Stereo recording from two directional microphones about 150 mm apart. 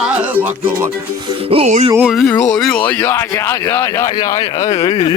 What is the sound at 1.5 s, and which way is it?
Music, 50° right (ahead or behind).